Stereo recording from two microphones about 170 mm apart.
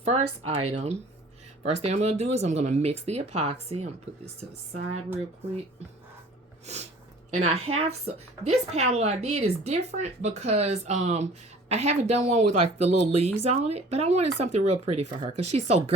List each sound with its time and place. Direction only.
0.0 s a woman's voice: 40° right (ahead or behind)
6.7 s a woman's voice: 40° right (ahead or behind)